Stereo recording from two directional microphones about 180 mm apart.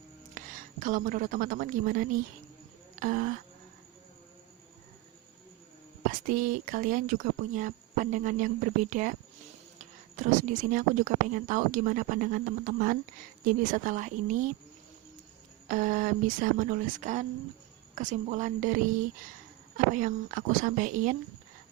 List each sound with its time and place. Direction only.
0.3 s a woman's voice: 45° right (ahead or behind)
2.9 s a sound: 45° right (ahead or behind)
6.1 s speech: 50° right (ahead or behind)
15.6 s speech: 45° right (ahead or behind)